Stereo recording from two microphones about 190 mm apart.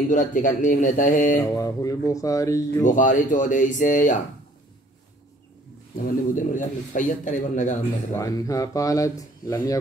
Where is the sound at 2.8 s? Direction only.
45° left (ahead or behind).